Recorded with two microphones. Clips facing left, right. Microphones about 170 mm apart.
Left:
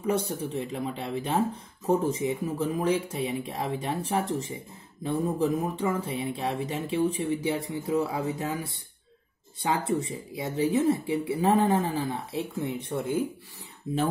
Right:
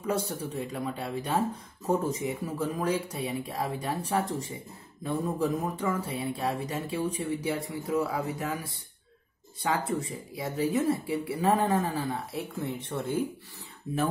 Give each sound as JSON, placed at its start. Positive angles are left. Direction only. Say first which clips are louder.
{"t": 0.6, "sound": "speech", "louder": "left 2 dB", "side_deg": 25}